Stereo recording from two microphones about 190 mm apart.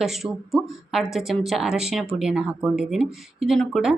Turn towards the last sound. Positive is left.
turn(degrees=0)  # may be behind; listen again after turning